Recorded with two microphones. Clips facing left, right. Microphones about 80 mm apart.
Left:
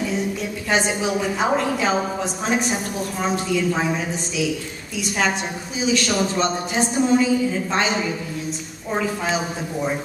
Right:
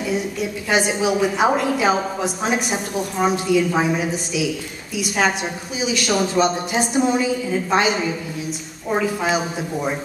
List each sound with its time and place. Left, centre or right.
0.0 s a woman's voice: centre
5.9 s a woman's voice: centre